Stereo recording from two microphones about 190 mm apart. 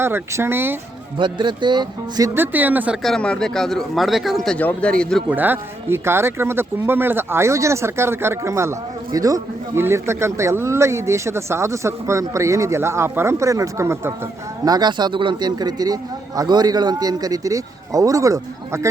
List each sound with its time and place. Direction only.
0.0 s speech: 10° right (ahead or behind)
1.2 s speech: 25° right (ahead or behind); by 5.2 s 5° left (ahead or behind)
5.3 s a man's voice: 10° right (ahead or behind)